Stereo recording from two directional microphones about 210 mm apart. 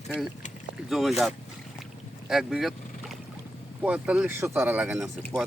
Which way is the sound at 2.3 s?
Centre (ahead or behind).